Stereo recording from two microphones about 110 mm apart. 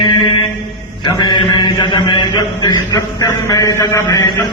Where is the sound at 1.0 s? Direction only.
40° left (ahead or behind).